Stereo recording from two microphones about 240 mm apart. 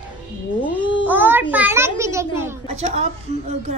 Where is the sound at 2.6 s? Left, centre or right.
Right.